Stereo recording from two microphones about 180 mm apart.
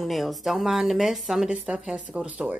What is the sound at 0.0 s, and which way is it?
Speech, centre (ahead or behind).